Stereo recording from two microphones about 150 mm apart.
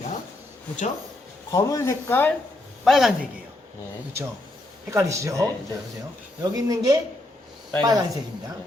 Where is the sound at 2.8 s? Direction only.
Centre (ahead or behind).